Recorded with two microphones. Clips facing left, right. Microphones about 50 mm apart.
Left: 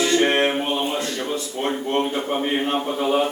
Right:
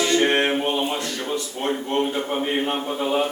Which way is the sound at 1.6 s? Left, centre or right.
Centre.